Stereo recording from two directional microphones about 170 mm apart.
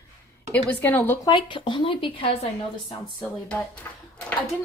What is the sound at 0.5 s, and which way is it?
Speech, 10° left (ahead or behind).